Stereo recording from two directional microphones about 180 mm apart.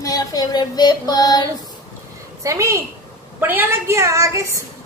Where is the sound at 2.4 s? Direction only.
15° right (ahead or behind).